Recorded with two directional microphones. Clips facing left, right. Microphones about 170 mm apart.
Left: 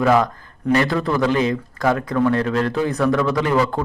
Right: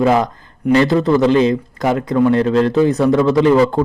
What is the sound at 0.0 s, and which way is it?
A man's voice, 20° right (ahead or behind).